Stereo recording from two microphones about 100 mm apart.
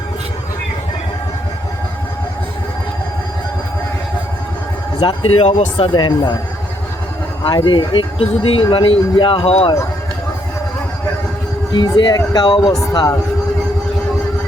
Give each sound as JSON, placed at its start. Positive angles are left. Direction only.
{"t": 5.3, "sound": "speech", "side_deg": 75}
{"t": 7.4, "sound": "speech", "side_deg": 55}
{"t": 11.7, "sound": "speech", "side_deg": 50}